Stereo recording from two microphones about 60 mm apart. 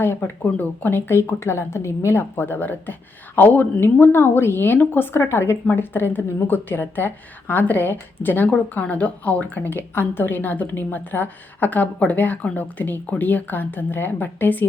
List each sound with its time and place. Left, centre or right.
0.0 s a woman's voice: left
0.4 s a woman's voice: left